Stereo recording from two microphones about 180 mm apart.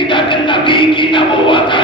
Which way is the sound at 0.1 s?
25° left (ahead or behind).